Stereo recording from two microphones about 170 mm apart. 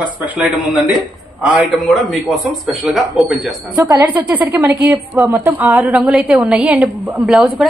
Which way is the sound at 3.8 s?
20° right (ahead or behind).